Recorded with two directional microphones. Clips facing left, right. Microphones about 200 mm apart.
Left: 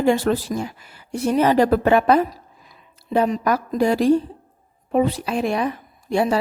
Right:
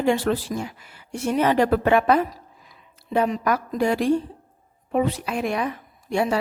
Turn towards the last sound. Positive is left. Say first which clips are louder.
# left 3 dB
turn(degrees=35)  # may be behind; listen again after turning